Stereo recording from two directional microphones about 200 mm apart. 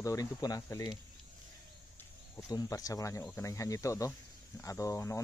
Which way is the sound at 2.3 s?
15° left (ahead or behind).